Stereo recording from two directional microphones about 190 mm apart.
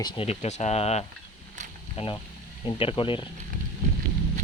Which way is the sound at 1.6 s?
40° right (ahead or behind).